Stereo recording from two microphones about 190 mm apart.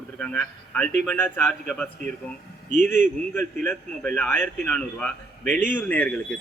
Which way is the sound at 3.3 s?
5° left (ahead or behind).